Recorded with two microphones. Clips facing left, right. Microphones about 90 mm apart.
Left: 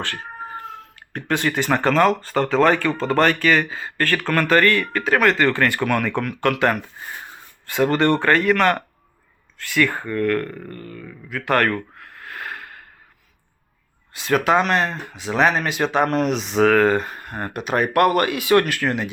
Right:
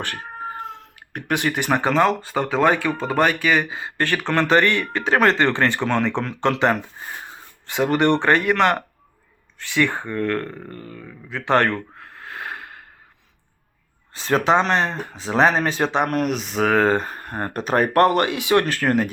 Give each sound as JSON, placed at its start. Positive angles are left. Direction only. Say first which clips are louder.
{"t": 0.0, "sound": "speech", "louder": "even", "side_deg": -15}
{"t": 14.1, "sound": "speech", "louder": "even", "side_deg": -30}
{"t": 16.0, "sound": "speech", "louder": "left 2 dB", "side_deg": -5}
{"t": 16.6, "sound": "speech", "louder": "left 1 dB", "side_deg": -25}
{"t": 18.6, "sound": "speech", "louder": "right 3 dB", "side_deg": -35}